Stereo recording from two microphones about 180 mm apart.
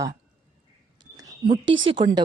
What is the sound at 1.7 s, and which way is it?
Speech, 90° right.